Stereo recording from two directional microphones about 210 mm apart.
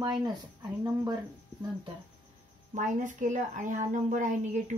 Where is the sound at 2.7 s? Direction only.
35° right (ahead or behind).